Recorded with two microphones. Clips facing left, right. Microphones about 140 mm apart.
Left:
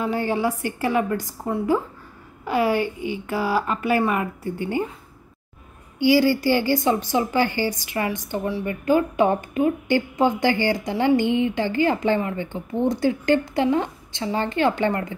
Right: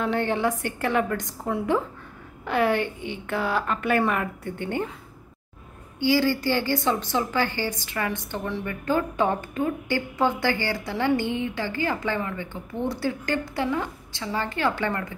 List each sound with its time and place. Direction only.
0.0 s a woman's voice: 5° left (ahead or behind)
5.9 s a woman's voice: 15° left (ahead or behind)